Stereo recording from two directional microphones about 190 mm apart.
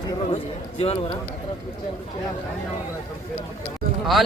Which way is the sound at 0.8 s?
30° left (ahead or behind).